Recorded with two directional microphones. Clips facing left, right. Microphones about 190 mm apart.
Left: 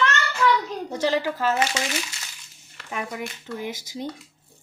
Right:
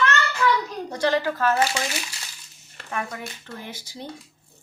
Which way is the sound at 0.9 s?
15° left (ahead or behind).